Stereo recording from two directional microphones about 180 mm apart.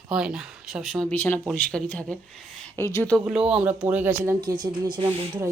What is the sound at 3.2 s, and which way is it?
Speech, 5° right (ahead or behind).